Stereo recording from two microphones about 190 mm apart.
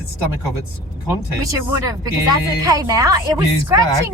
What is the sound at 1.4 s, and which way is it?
Speech, 15° right (ahead or behind).